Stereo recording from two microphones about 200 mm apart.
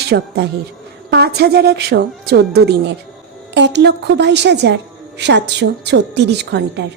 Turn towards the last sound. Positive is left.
turn(degrees=-60)  # may be behind; listen again after turning